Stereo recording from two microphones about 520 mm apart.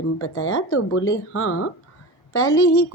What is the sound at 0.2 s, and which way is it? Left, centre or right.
A woman's voice, left.